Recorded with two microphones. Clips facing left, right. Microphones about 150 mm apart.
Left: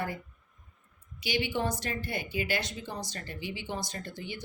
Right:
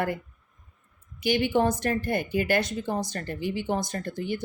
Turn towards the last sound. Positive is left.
turn(degrees=-50)  # may be behind; listen again after turning